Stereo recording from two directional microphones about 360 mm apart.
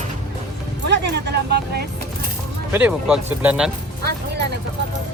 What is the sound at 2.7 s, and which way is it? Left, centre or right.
Speech, centre.